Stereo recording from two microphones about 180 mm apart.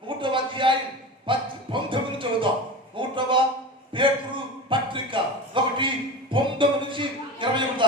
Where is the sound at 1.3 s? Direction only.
30° right (ahead or behind).